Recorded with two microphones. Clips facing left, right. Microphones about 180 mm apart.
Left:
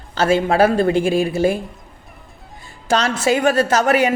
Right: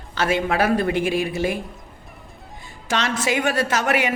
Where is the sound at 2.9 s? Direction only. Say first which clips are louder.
Left 5 dB; 35° left (ahead or behind).